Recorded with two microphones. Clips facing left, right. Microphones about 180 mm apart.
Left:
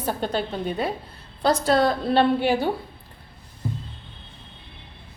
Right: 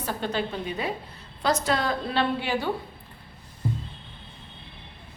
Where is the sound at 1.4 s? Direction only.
30° left (ahead or behind).